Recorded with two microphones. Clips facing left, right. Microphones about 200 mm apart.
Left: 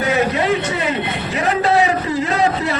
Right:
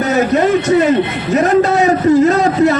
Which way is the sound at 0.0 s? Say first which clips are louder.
Right 5 dB; 45° right (ahead or behind).